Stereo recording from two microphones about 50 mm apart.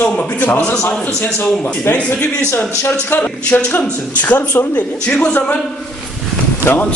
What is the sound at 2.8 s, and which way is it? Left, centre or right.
A man's voice, left.